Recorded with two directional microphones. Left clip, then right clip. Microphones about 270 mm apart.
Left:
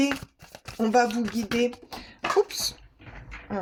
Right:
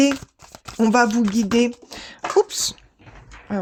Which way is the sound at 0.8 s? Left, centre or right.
Right.